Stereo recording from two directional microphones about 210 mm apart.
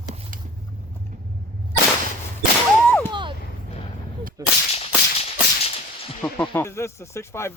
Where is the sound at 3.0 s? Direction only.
20° right (ahead or behind).